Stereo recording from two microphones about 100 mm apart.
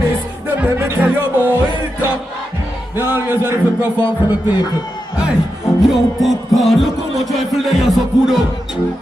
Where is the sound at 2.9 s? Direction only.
20° right (ahead or behind).